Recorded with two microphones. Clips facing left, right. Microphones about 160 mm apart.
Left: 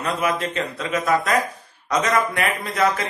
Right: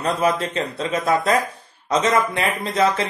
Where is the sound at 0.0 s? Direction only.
35° right (ahead or behind).